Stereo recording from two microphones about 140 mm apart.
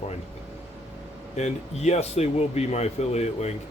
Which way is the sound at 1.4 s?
55° left (ahead or behind).